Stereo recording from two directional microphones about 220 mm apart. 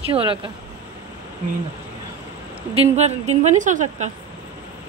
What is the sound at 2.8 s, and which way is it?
A woman's voice, 30° right (ahead or behind).